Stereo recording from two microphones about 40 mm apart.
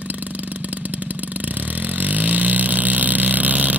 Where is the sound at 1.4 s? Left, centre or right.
Right.